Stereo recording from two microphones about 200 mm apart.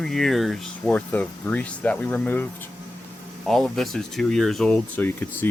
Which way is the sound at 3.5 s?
Centre (ahead or behind).